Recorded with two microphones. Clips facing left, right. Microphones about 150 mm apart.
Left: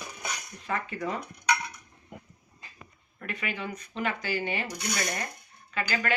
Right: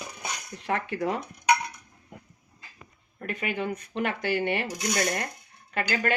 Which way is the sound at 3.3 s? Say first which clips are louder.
Right 5 dB; 50° right (ahead or behind).